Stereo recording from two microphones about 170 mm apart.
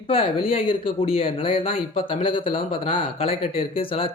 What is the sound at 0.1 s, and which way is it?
Speech, 35° left (ahead or behind).